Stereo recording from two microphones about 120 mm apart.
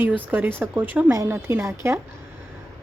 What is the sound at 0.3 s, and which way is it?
A woman's voice, 15° right (ahead or behind).